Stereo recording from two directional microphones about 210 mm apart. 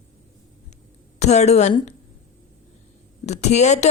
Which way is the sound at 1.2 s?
30° left (ahead or behind).